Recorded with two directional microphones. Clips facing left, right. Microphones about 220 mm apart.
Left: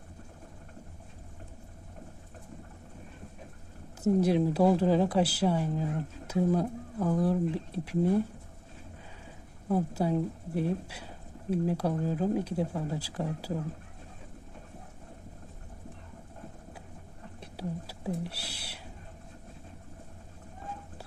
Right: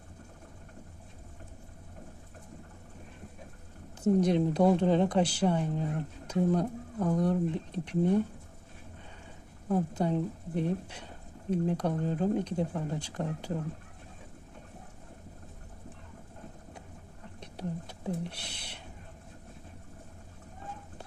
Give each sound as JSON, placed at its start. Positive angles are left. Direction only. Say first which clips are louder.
{"t": 4.0, "sound": "speech", "louder": "even", "side_deg": 5}
{"t": 9.6, "sound": "speech", "louder": "left 1 dB", "side_deg": 5}
{"t": 17.4, "sound": "speech", "louder": "even", "side_deg": 5}